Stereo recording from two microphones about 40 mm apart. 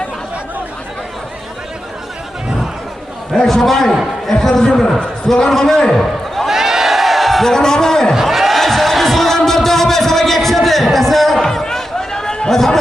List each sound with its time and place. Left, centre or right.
3.4 s a man's voice: centre
6.5 s a sound: centre
7.4 s a man's voice: centre
8.2 s music: centre
12.5 s a man's voice: centre